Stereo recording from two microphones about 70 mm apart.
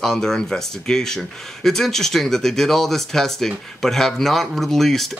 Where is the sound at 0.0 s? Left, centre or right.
Centre.